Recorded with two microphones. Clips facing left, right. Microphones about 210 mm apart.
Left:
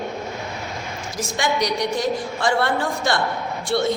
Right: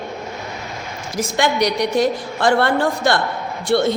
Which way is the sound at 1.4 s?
65° right (ahead or behind).